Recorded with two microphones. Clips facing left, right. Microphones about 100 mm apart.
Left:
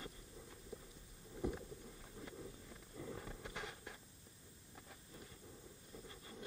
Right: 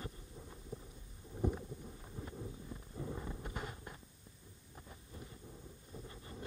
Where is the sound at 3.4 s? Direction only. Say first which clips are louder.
Right 4 dB; 45° right (ahead or behind).